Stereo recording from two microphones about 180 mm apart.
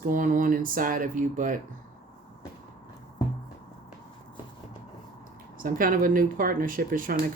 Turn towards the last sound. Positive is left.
turn(degrees=-50)  # may be behind; listen again after turning